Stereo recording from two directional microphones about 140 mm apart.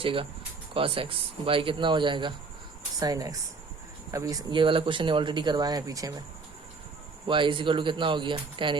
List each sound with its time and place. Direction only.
0.0 s speech: 40° right (ahead or behind); by 6.2 s 25° right (ahead or behind)
7.3 s speech: 35° right (ahead or behind)